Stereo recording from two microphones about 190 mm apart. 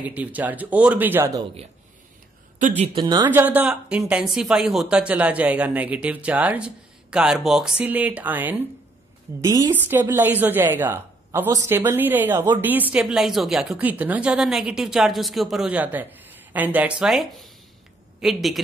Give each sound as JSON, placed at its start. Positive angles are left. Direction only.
{"t": 0.0, "sound": "speech", "side_deg": -10}
{"t": 2.8, "sound": "speech", "side_deg": -30}
{"t": 3.3, "sound": "a woman's voice", "side_deg": -10}